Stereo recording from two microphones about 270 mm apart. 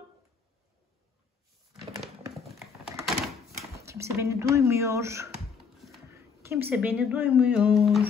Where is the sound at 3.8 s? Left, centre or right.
Centre.